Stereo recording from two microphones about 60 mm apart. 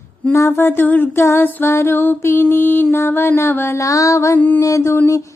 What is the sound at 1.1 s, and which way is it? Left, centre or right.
Music, left.